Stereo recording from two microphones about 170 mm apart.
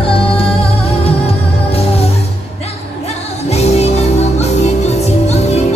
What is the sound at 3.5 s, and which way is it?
Music, 40° left (ahead or behind).